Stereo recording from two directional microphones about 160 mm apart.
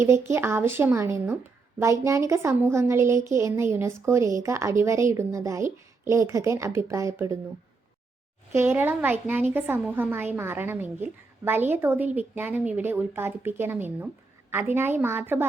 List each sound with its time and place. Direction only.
0.0 s a woman's voice: 15° right (ahead or behind)
8.5 s a woman's voice: 15° right (ahead or behind)